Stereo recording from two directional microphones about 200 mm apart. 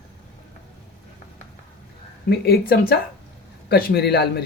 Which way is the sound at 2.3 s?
50° left (ahead or behind).